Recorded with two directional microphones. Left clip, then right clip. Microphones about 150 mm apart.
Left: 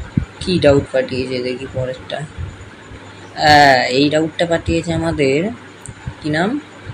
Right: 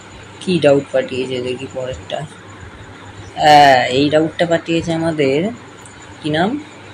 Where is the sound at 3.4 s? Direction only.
5° left (ahead or behind).